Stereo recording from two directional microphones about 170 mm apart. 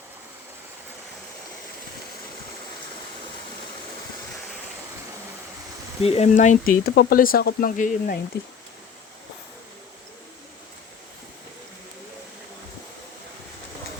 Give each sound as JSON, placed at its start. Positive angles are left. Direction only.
{"t": 6.0, "sound": "speech", "side_deg": 40}
{"t": 6.8, "sound": "speech", "side_deg": 65}